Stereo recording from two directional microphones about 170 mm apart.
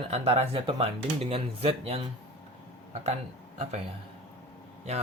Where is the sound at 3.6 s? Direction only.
40° right (ahead or behind).